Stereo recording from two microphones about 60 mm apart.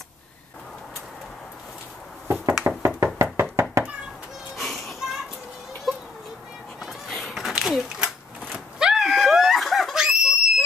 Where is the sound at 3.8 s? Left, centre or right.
Centre.